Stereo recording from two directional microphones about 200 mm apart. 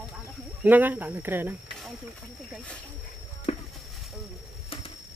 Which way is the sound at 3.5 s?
30° left (ahead or behind).